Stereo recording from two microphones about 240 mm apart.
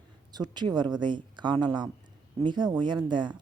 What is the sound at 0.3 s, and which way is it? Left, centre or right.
Speech, centre.